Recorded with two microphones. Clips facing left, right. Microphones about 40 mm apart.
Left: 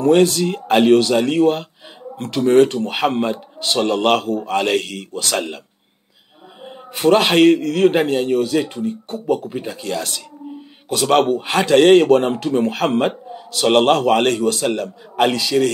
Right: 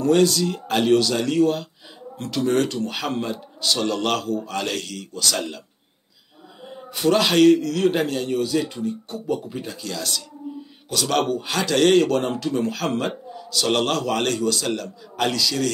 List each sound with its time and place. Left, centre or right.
0.0 s speech: left
6.6 s speech: left
10.4 s a sound: left
10.9 s speech: left